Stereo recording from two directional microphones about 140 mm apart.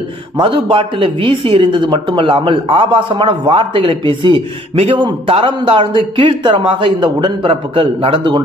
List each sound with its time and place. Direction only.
0.4 s speech: 35° right (ahead or behind)